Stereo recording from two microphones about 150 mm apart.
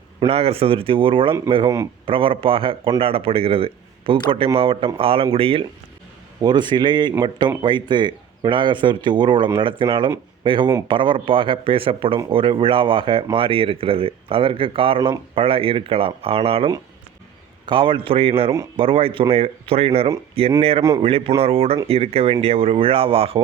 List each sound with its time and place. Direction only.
0.3 s speech: 40° right (ahead or behind)
17.7 s speech: 35° right (ahead or behind)